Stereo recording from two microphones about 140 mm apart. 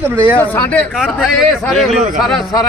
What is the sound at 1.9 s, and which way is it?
Speech, 60° right (ahead or behind).